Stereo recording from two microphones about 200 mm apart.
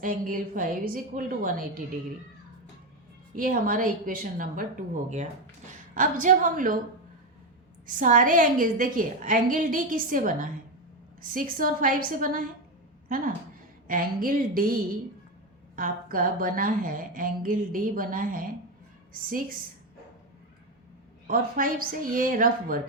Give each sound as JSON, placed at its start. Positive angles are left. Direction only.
{"t": 0.0, "sound": "speech", "side_deg": -45}
{"t": 3.3, "sound": "a woman's voice", "side_deg": -45}
{"t": 7.9, "sound": "a woman's voice", "side_deg": -40}
{"t": 21.2, "sound": "speech", "side_deg": -45}